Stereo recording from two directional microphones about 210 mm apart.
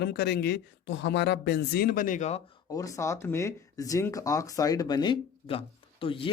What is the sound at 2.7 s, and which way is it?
Speech, 15° left (ahead or behind).